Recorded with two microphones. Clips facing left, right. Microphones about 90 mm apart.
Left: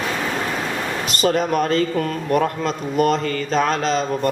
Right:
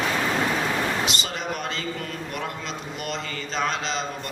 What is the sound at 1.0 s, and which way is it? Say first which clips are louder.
A man's voice: left 9 dB; 45° left (ahead or behind).